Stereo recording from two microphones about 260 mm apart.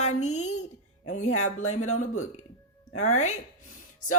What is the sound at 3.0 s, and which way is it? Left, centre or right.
Speech, left.